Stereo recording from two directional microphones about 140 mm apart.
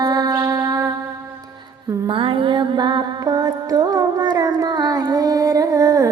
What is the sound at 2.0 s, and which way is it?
Music, 40° right (ahead or behind).